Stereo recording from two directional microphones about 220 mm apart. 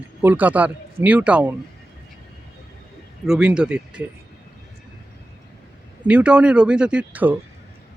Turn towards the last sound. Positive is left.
turn(degrees=-5)  # may be behind; listen again after turning